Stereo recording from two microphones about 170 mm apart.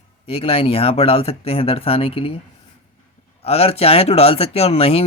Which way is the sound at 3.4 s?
35° left (ahead or behind).